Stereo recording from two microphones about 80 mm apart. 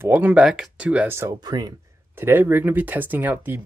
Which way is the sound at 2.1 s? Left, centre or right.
Right.